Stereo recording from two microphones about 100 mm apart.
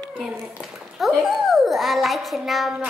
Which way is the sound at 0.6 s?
Centre (ahead or behind).